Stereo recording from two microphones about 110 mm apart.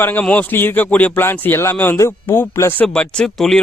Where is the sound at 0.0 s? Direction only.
15° left (ahead or behind).